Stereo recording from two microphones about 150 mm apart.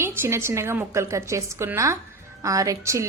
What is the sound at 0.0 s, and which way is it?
A woman's voice, 15° right (ahead or behind).